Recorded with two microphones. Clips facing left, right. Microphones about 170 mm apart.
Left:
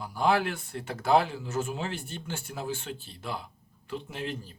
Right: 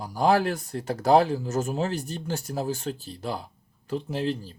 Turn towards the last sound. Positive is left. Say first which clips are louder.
# right 8 dB
turn(degrees=-35)  # may be behind; listen again after turning